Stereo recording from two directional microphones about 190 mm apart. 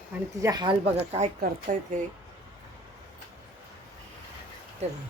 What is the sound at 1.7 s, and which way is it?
Speech, 45° right (ahead or behind).